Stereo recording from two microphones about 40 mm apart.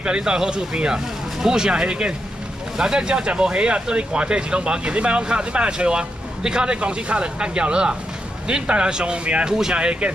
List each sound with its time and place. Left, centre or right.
0.0 s speech: right